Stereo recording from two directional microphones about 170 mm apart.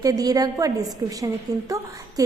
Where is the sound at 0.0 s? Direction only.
20° right (ahead or behind).